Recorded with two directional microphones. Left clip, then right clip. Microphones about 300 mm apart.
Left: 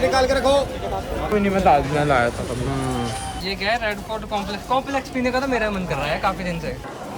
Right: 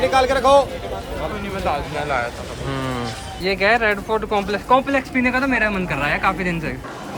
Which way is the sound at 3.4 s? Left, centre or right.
Centre.